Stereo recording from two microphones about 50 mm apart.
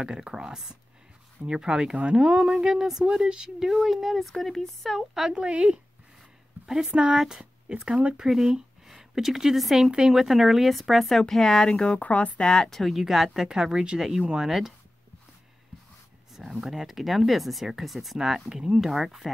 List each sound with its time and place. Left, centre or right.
0.0 s speech: centre
5.4 s speech: centre
6.9 s speech: right
8.8 s speech: centre
12.0 s a woman's voice: left
12.4 s speech: centre
16.3 s speech: centre